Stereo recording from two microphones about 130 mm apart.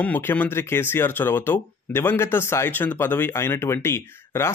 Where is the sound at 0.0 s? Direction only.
15° left (ahead or behind).